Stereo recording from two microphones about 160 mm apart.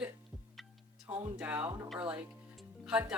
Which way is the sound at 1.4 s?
10° right (ahead or behind).